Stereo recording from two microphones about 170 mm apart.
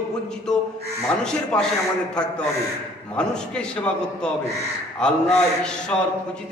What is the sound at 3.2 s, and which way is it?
A man's voice, 5° left (ahead or behind).